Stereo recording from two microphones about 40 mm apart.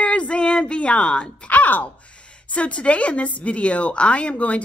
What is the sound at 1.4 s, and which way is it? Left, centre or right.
A woman's voice, left.